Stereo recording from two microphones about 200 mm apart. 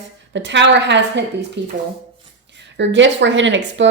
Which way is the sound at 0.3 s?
65° right (ahead or behind).